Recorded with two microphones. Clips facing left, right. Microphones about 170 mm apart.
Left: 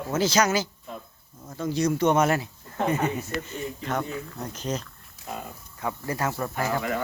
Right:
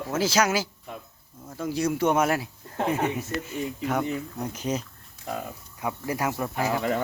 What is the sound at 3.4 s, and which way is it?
Speech, 10° right (ahead or behind).